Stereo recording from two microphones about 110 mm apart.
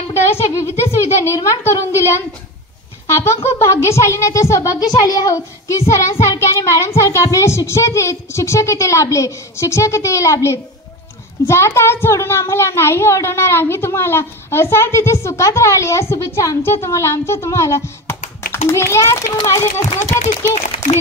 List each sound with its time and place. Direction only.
0.1 s speech: 25° left (ahead or behind)
3.2 s speech: 25° left (ahead or behind)
20.2 s speech: 90° left